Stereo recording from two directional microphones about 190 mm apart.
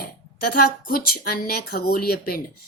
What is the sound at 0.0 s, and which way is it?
Speech, 55° left (ahead or behind).